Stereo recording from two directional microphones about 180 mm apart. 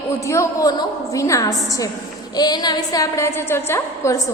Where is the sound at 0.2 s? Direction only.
15° left (ahead or behind).